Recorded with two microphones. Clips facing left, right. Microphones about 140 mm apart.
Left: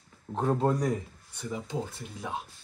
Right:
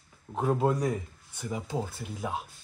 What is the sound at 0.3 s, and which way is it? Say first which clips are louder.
A woman's voice: even; 5° right (ahead or behind).